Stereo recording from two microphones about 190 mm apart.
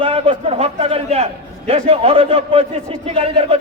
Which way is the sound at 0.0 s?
30° right (ahead or behind).